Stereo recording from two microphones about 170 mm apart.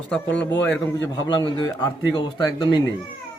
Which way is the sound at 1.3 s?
25° left (ahead or behind).